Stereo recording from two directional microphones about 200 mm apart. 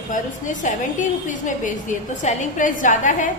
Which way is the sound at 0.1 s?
40° left (ahead or behind).